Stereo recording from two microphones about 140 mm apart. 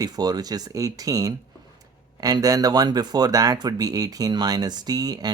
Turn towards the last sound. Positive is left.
turn(degrees=-30)  # may be behind; listen again after turning